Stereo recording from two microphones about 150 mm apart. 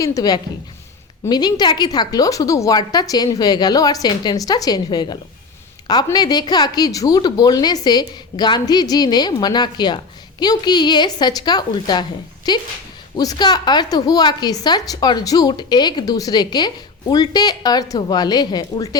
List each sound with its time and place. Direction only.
0.0 s a woman's voice: 25° left (ahead or behind)
6.1 s a woman's voice: 30° left (ahead or behind)